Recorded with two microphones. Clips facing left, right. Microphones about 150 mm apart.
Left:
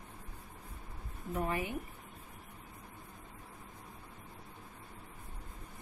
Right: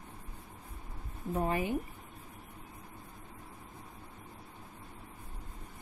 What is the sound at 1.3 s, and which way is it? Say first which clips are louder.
Speech: right 3 dB; 30° right (ahead or behind).